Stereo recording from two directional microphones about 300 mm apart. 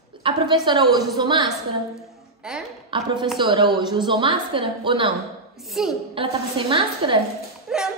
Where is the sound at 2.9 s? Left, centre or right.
Centre.